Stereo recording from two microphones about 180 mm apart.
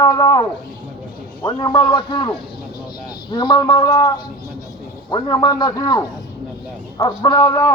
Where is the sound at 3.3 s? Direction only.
25° left (ahead or behind).